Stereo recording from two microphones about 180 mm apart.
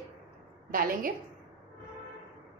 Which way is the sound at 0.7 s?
50° right (ahead or behind).